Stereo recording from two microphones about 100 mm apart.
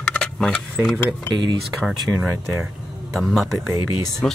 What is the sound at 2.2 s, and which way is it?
Speech, 25° right (ahead or behind).